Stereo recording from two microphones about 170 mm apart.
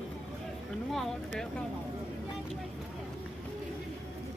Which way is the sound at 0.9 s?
Centre (ahead or behind).